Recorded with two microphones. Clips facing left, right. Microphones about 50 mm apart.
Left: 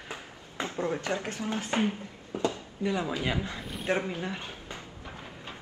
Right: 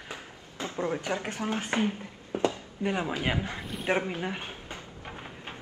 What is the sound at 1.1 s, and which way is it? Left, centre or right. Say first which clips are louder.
Speech: right 1 dB; right.